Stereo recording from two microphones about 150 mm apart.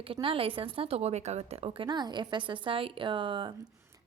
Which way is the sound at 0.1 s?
35° right (ahead or behind).